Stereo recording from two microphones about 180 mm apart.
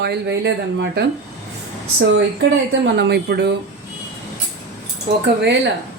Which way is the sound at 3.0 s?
65° right (ahead or behind).